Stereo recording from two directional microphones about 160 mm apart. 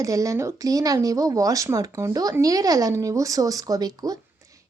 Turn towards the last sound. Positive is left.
turn(degrees=-25)  # may be behind; listen again after turning